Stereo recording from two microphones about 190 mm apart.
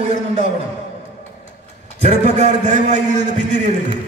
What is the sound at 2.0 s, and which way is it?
A man's voice, 35° right (ahead or behind).